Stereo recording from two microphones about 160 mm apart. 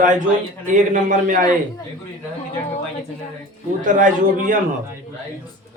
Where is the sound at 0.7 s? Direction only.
50° right (ahead or behind).